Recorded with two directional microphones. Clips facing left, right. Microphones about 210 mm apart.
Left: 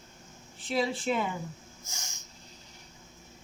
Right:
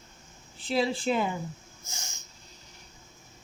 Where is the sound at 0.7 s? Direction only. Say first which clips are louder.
Right 2 dB; 35° right (ahead or behind).